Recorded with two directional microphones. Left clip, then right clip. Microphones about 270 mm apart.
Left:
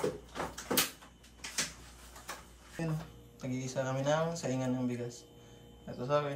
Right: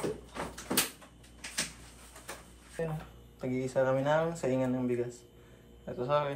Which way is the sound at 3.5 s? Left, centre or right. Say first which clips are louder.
Right 7 dB; centre.